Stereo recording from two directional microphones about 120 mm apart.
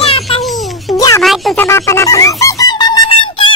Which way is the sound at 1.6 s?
25° left (ahead or behind).